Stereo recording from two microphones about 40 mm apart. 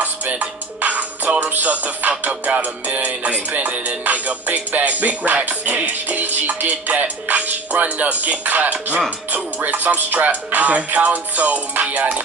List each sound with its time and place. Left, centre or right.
0.0 s music: right